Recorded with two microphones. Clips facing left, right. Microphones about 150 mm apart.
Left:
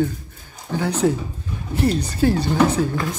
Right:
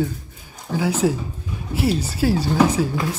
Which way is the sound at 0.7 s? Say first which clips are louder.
Even; 5° right (ahead or behind).